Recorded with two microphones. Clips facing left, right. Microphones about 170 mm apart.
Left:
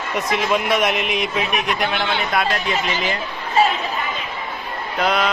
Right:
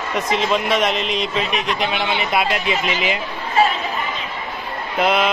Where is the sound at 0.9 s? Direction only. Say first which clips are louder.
Even; 55° left (ahead or behind).